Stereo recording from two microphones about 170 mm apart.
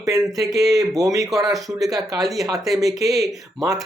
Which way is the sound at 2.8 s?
20° right (ahead or behind).